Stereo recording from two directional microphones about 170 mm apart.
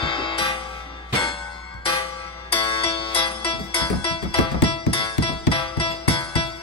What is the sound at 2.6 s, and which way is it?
Music, 35° left (ahead or behind).